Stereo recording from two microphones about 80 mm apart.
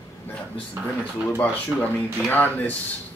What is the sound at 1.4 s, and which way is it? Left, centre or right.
Speech, left.